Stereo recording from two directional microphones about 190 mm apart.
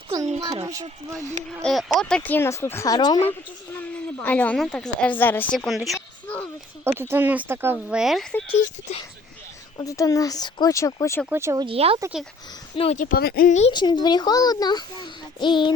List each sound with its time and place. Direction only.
0.4 s speech: 15° right (ahead or behind)
1.6 s a woman's voice: centre (ahead or behind)
6.8 s speech: 10° right (ahead or behind); by 8.5 s 5° left (ahead or behind)
8.9 s speech: 35° left (ahead or behind)
9.7 s a woman's voice: 15° left (ahead or behind)
11.3 s speech: 15° right (ahead or behind)
11.6 s speech: 30° right (ahead or behind)
12.7 s a child's voice: 30° left (ahead or behind)
13.0 s speech: 50° left (ahead or behind)
13.6 s a child's voice: 25° left (ahead or behind)